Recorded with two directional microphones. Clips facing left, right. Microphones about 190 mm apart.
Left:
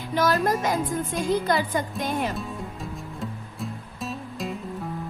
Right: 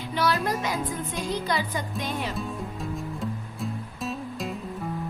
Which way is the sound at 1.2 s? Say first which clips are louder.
Left 5 dB; 50° left (ahead or behind).